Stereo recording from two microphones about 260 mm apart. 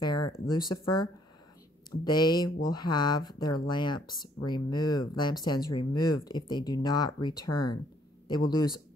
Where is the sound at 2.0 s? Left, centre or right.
Centre.